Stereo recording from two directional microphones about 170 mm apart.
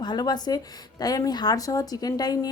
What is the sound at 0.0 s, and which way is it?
A man's voice, 25° left (ahead or behind).